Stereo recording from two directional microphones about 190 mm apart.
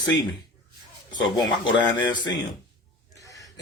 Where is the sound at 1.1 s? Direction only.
25° left (ahead or behind).